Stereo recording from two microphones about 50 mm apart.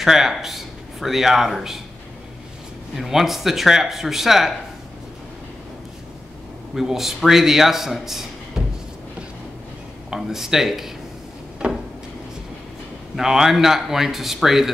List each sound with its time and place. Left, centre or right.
0.0 s speech: centre
3.0 s speech: centre
6.7 s a man's voice: centre
10.1 s speech: centre
11.6 s a sound: right
13.1 s speech: centre